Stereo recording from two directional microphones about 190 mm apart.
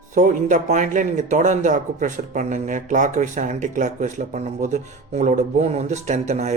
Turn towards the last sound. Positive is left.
turn(degrees=-35)  # may be behind; listen again after turning